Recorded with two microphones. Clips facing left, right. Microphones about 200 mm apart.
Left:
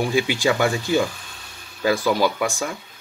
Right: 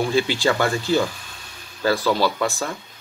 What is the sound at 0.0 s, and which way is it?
Speech, 15° left (ahead or behind).